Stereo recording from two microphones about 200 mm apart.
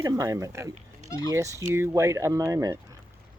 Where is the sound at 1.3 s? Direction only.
15° right (ahead or behind).